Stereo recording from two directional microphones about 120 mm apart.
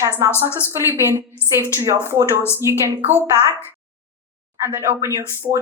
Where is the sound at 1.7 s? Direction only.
25° right (ahead or behind).